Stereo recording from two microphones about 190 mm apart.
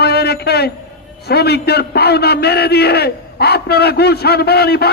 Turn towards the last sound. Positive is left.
turn(degrees=55)  # may be behind; listen again after turning